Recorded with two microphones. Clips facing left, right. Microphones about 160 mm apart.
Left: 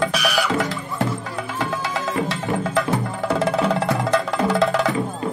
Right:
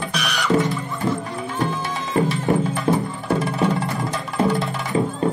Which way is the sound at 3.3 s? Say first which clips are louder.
Left 1 dB; 90° left.